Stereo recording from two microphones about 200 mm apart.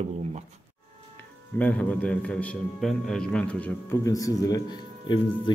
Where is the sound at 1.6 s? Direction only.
5° left (ahead or behind).